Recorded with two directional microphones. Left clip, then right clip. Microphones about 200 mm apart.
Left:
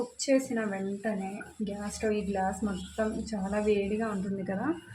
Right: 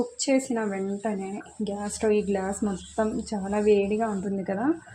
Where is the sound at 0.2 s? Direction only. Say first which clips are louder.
Right 1 dB; 30° right (ahead or behind).